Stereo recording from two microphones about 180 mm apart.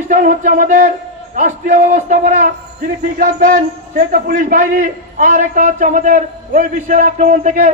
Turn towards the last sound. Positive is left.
turn(degrees=-45)  # may be behind; listen again after turning